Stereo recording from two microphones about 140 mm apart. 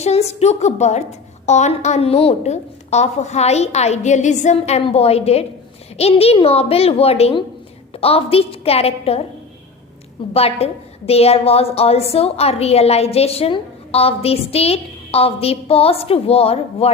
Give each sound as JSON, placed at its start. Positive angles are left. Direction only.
{"t": 0.0, "sound": "a woman's voice", "side_deg": 50}
{"t": 4.5, "sound": "a woman's voice", "side_deg": 45}
{"t": 10.3, "sound": "a woman's voice", "side_deg": 45}